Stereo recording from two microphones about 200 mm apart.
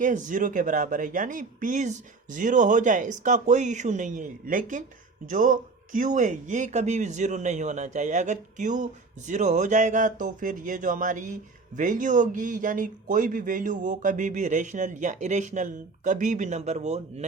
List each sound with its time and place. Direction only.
0.0 s speech: 40° right (ahead or behind)